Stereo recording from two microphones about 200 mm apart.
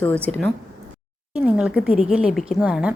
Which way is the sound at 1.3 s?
5° right (ahead or behind).